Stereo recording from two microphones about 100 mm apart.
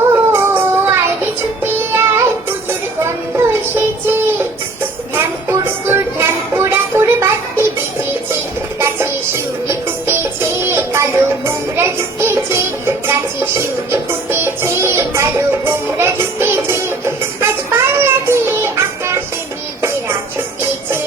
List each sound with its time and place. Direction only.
0.0 s music: 25° right (ahead or behind)
8.8 s music: 25° right (ahead or behind)